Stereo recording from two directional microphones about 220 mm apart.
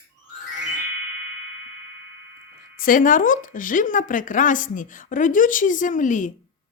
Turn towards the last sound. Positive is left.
turn(degrees=35)  # may be behind; listen again after turning